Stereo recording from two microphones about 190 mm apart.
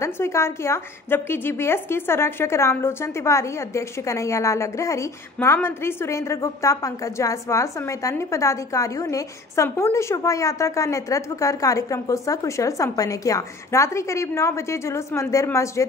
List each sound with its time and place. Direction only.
0.0 s a woman's voice: 15° left (ahead or behind)